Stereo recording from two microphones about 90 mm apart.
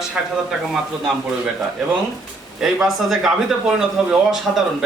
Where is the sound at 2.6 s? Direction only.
5° right (ahead or behind).